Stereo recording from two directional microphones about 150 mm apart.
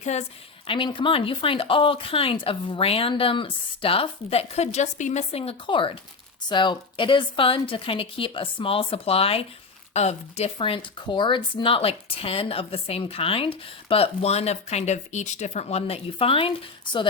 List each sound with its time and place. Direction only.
0.0 s a woman's voice: 50° left (ahead or behind)
0.7 s speech: 35° left (ahead or behind)